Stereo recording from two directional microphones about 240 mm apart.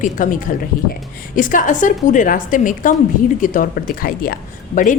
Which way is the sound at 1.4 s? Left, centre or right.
Left.